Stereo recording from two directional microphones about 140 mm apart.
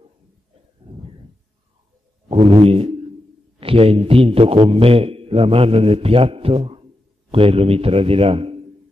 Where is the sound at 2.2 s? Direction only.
40° right (ahead or behind).